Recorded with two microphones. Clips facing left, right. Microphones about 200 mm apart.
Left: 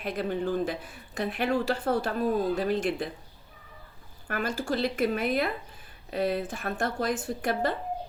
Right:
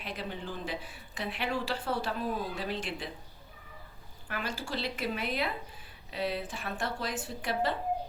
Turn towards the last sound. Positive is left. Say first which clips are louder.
# left 4 dB
turn(degrees=50)  # may be behind; listen again after turning